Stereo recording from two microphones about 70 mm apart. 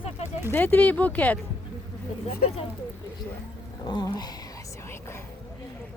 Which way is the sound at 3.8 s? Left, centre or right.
Left.